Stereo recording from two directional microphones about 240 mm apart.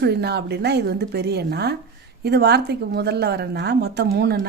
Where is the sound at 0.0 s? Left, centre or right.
Right.